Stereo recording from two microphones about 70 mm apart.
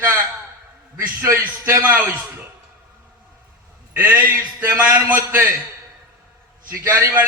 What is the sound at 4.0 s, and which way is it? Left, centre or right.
A man's voice, right.